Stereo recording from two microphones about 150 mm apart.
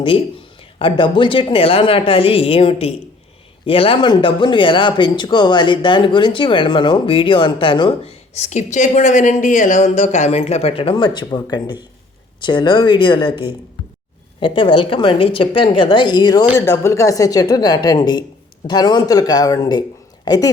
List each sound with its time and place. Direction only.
0.8 s a woman's voice: 35° left (ahead or behind)